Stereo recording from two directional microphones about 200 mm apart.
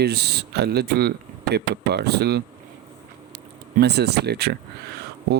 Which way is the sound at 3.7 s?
55° right (ahead or behind).